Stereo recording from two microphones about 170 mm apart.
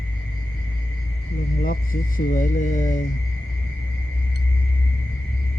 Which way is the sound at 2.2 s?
50° left (ahead or behind).